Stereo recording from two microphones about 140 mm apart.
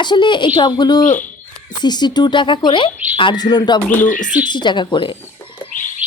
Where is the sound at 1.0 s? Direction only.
65° left (ahead or behind).